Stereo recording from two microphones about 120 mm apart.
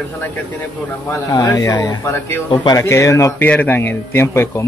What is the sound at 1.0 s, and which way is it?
Speech, 25° left (ahead or behind).